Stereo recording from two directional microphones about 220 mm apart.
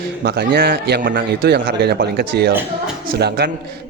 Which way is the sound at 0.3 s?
45° right (ahead or behind).